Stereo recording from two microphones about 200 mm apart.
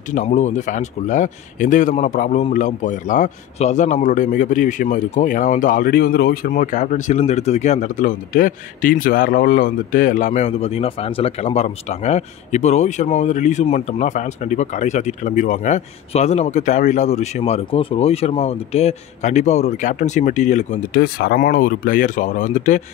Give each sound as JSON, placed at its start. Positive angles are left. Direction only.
{"t": 0.1, "sound": "speech", "side_deg": 35}
{"t": 21.0, "sound": "speech", "side_deg": 55}